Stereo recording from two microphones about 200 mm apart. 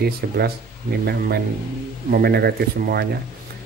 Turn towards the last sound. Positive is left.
turn(degrees=-50)  # may be behind; listen again after turning